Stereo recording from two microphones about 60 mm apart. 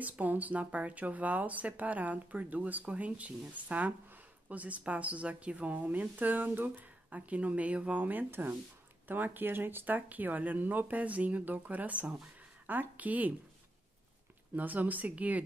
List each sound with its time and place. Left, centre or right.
0.0 s a woman's voice: right
14.5 s a woman's voice: right